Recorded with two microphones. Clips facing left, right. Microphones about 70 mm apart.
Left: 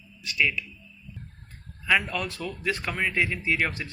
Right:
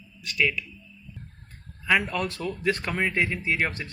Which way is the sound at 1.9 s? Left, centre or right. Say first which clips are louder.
Right 1 dB; right.